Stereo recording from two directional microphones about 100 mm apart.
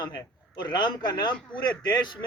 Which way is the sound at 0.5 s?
50° left (ahead or behind).